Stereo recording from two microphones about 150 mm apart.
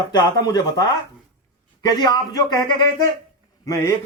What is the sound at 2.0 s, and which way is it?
Speech, 30° left (ahead or behind).